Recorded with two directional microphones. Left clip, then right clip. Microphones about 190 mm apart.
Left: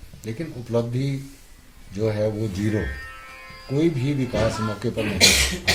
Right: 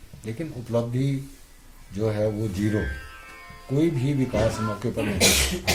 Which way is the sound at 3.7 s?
15° left (ahead or behind).